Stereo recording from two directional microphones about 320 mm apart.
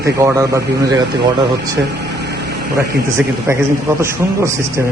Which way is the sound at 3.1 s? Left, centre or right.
Centre.